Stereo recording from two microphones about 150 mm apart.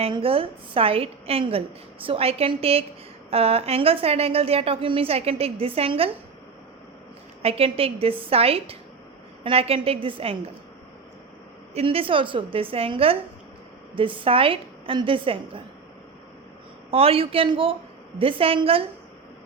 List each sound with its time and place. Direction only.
0.0 s a woman's voice: 40° right (ahead or behind)
7.4 s a woman's voice: 40° right (ahead or behind)
11.7 s a woman's voice: 40° right (ahead or behind)
16.9 s a woman's voice: 40° right (ahead or behind)